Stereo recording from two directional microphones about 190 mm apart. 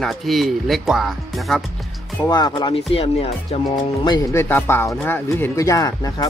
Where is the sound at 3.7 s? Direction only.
20° left (ahead or behind).